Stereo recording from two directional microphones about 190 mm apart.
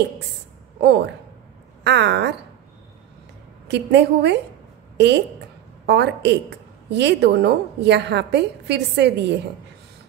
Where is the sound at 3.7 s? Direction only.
65° right (ahead or behind).